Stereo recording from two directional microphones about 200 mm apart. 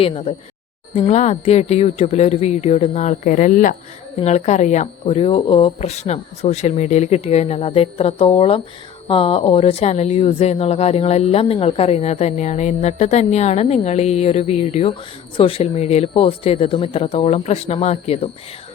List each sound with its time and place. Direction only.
0.0 s speech: 30° left (ahead or behind)